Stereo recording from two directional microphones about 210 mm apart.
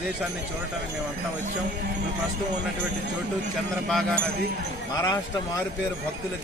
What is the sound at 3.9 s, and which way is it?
Speech, centre (ahead or behind).